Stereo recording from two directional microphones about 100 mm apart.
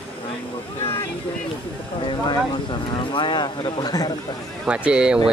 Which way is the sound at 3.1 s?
50° left (ahead or behind).